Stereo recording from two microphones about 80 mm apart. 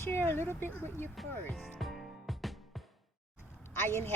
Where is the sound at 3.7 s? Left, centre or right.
Left.